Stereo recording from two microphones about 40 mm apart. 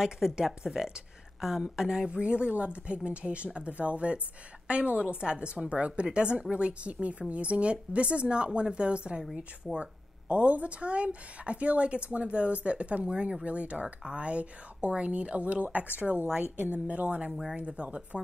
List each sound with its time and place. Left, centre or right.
0.0 s speech: centre
2.0 s a woman's voice: right
16.5 s a woman's voice: right
16.8 s speech: right